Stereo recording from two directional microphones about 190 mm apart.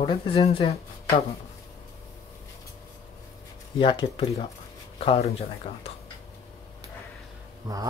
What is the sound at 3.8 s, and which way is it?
Speech, 25° left (ahead or behind).